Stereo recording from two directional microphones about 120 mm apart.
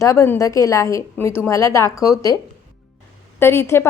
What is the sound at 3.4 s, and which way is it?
Speech, 20° left (ahead or behind).